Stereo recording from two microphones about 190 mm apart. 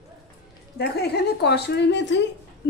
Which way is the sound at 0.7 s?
60° left (ahead or behind).